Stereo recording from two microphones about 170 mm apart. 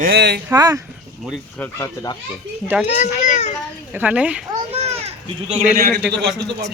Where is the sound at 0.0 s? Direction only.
70° right (ahead or behind).